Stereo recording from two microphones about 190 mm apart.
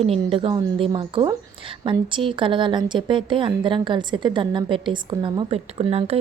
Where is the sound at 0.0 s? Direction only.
30° right (ahead or behind).